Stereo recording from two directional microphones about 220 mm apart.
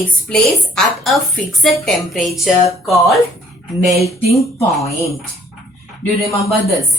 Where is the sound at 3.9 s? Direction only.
30° left (ahead or behind).